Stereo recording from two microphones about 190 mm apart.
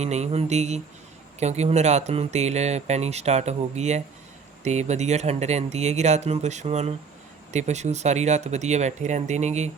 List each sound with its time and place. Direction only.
0.0 s speech: 35° right (ahead or behind)